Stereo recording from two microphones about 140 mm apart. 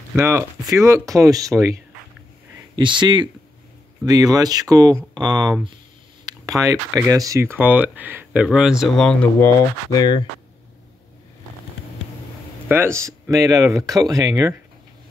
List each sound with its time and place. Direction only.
0.1 s speech: 15° right (ahead or behind)
2.7 s speech: 35° right (ahead or behind); by 9.1 s centre (ahead or behind)
9.2 s speech: 20° left (ahead or behind)
12.6 s speech: 15° right (ahead or behind)